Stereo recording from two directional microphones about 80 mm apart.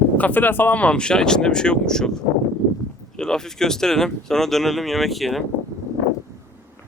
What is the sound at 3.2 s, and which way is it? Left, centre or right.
Speech, centre.